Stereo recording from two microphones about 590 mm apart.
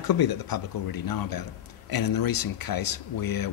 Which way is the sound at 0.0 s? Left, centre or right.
Left.